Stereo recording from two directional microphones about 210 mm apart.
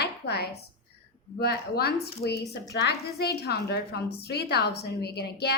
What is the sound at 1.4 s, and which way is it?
A woman's voice, 50° left (ahead or behind).